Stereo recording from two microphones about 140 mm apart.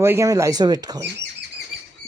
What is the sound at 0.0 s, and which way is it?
Speech, 20° right (ahead or behind).